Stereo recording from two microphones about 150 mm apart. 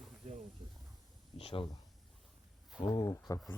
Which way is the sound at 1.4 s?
40° left (ahead or behind).